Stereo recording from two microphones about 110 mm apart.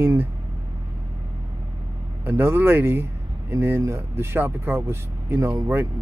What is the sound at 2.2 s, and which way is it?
Speech, 20° right (ahead or behind).